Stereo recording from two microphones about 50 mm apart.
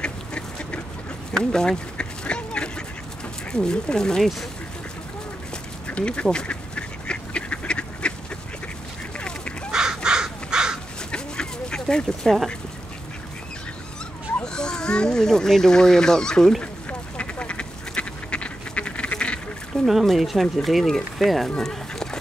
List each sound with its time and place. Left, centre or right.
0.0 s duck: centre
1.4 s a sound: centre
3.5 s speech: centre
5.9 s speech: left
6.3 s duck: left
9.7 s crow: centre
11.1 s dog: centre
14.4 s a child's voice: centre
17.2 s duck: left
19.9 s speech: centre
21.5 s a sound: centre